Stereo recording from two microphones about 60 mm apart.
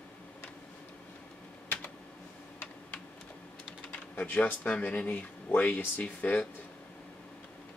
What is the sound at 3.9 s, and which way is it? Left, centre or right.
Speech, left.